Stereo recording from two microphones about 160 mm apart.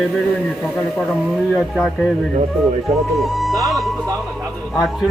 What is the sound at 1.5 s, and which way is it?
Speech, centre (ahead or behind).